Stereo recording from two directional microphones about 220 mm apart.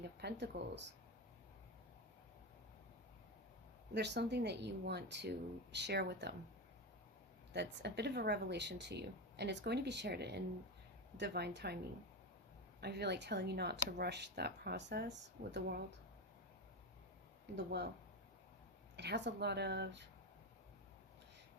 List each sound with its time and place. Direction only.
0.0 s speech: 50° right (ahead or behind)
3.9 s speech: 50° right (ahead or behind)
7.5 s speech: 50° right (ahead or behind)
12.8 s speech: 50° right (ahead or behind)
18.9 s speech: 50° right (ahead or behind)